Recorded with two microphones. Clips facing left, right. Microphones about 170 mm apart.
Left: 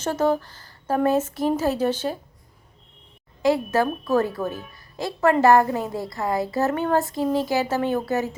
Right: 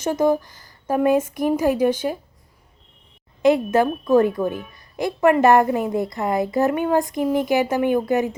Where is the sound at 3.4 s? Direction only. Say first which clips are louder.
Right 4 dB; 20° right (ahead or behind).